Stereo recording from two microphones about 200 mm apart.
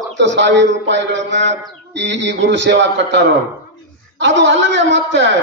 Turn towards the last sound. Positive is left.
turn(degrees=-60)  # may be behind; listen again after turning